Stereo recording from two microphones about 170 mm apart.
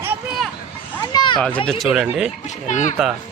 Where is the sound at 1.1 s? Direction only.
25° left (ahead or behind).